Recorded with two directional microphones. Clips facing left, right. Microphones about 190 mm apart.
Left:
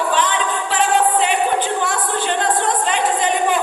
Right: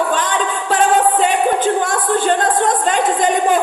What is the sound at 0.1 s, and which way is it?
Music, 45° right (ahead or behind).